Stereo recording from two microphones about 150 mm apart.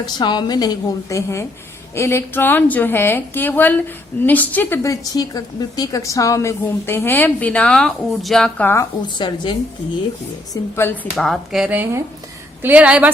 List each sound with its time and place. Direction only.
0.0 s a woman's voice: 30° left (ahead or behind); by 8.9 s 15° left (ahead or behind)
9.1 s a woman's voice: 30° left (ahead or behind)
10.5 s a woman's voice: 15° left (ahead or behind)
11.2 s a woman's voice: centre (ahead or behind)